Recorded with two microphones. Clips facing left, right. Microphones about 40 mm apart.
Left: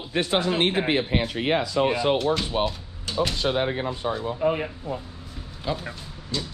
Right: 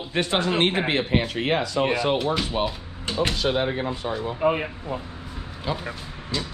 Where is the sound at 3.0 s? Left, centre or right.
Right.